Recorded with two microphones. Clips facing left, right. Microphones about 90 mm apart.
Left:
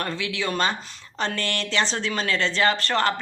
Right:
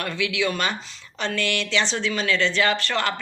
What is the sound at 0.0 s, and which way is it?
Speech, 30° left (ahead or behind).